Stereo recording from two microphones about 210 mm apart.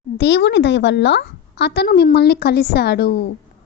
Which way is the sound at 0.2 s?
55° left (ahead or behind).